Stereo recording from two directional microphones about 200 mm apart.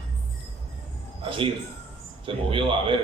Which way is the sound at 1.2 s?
25° right (ahead or behind).